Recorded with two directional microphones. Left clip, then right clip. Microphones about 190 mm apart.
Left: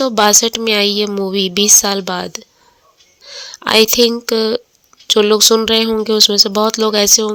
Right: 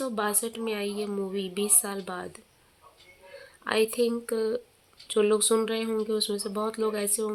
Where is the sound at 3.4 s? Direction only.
45° left (ahead or behind).